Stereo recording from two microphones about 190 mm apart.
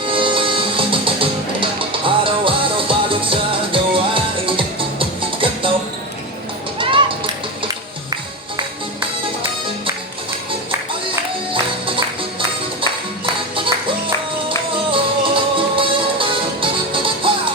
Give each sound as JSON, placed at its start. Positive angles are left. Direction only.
{"t": 0.0, "sound": "music", "side_deg": -25}
{"t": 6.7, "sound": "a sound", "side_deg": -25}
{"t": 11.5, "sound": "music", "side_deg": -25}
{"t": 14.8, "sound": "music", "side_deg": -25}